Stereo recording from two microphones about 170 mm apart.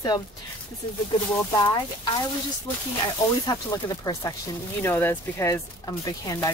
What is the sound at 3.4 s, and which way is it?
Speech, 20° left (ahead or behind).